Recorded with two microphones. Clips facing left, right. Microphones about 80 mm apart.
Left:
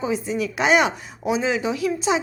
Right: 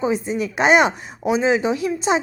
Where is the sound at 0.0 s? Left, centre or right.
Right.